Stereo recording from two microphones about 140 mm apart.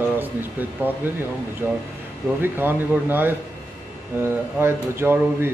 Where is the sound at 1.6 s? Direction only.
15° right (ahead or behind).